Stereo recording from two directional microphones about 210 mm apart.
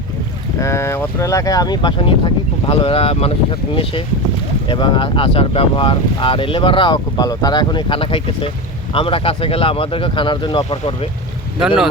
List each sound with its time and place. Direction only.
0.6 s speech: 15° left (ahead or behind)
4.7 s speech: 25° left (ahead or behind)